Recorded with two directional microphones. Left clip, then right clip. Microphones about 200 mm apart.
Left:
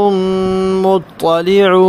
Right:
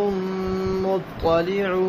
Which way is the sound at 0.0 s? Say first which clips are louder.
Left 11 dB; 50° left (ahead or behind).